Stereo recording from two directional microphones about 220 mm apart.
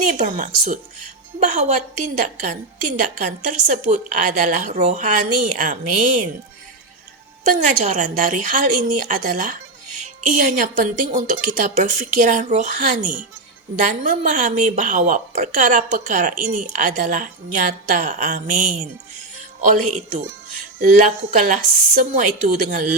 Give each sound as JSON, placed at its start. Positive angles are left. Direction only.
{"t": 0.1, "sound": "a woman's voice", "side_deg": -35}
{"t": 7.4, "sound": "a woman's voice", "side_deg": -35}
{"t": 20.7, "sound": "a woman's voice", "side_deg": -35}